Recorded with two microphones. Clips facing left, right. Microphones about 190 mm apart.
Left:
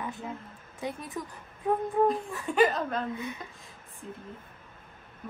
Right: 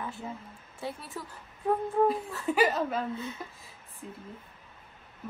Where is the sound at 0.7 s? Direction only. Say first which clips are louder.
Left 3 dB; 20° left (ahead or behind).